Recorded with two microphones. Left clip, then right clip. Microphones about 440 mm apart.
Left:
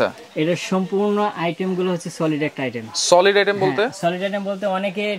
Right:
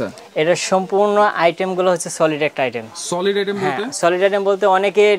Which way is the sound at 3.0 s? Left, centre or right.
Left.